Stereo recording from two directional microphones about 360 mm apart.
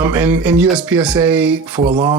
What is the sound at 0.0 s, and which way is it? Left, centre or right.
Speech, centre.